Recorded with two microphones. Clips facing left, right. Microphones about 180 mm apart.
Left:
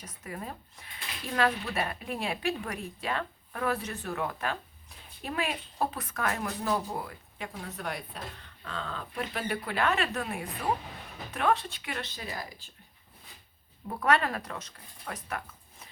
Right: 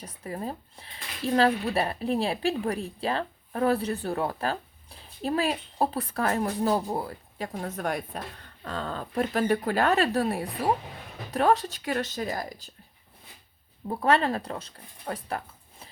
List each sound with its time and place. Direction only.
0.0 s speech: 30° right (ahead or behind)
13.8 s speech: 30° right (ahead or behind)